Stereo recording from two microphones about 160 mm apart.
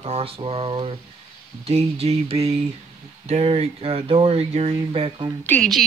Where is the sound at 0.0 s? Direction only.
40° right (ahead or behind).